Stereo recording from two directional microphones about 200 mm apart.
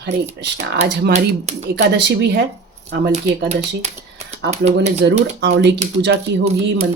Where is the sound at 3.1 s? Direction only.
35° right (ahead or behind).